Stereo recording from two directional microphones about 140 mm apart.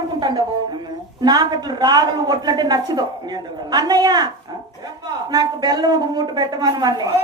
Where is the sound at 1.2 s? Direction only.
30° right (ahead or behind).